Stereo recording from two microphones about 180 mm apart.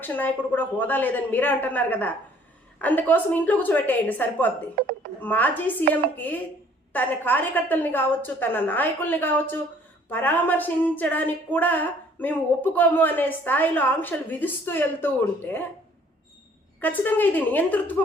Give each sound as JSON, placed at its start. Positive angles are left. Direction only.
{"t": 0.0, "sound": "a woman's voice", "side_deg": 10}
{"t": 4.8, "sound": "a woman's voice", "side_deg": -60}
{"t": 5.2, "sound": "a woman's voice", "side_deg": 10}
{"t": 16.8, "sound": "a woman's voice", "side_deg": 10}